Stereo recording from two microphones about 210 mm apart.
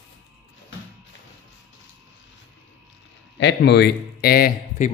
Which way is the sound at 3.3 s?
55° left (ahead or behind).